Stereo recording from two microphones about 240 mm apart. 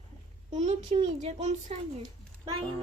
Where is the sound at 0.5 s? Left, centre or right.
Right.